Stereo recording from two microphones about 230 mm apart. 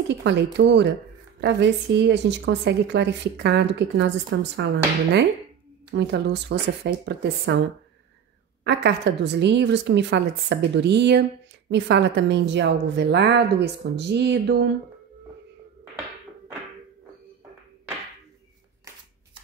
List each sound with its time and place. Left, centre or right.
0.1 s a woman's voice: right
5.9 s a woman's voice: right
8.6 s a woman's voice: right